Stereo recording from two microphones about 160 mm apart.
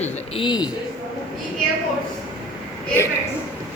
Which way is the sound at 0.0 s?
30° left (ahead or behind).